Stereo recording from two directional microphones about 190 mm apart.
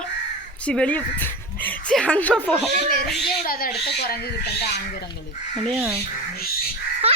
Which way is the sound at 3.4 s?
50° left (ahead or behind).